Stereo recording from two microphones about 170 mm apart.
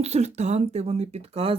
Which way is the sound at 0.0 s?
40° right (ahead or behind).